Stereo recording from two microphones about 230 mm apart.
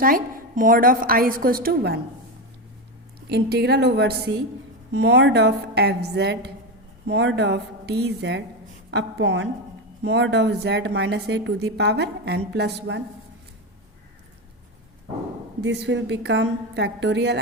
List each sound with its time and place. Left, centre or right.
0.0 s a woman's voice: right
3.2 s a woman's voice: right
15.6 s a woman's voice: right